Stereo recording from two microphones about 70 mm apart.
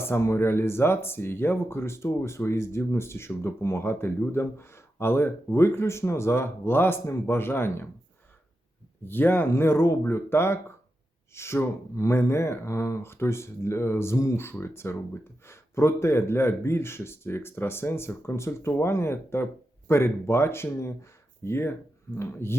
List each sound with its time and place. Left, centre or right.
0.0 s speech: left
9.0 s speech: left